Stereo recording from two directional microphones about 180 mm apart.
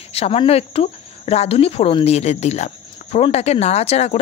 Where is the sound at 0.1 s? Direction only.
30° left (ahead or behind).